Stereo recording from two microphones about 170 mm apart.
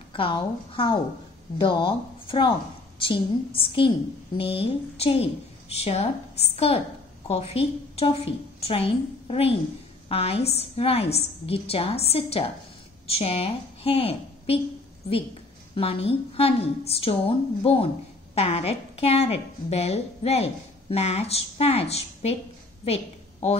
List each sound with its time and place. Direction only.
0.1 s a woman's voice: 30° left (ahead or behind)
15.7 s a woman's voice: 35° left (ahead or behind)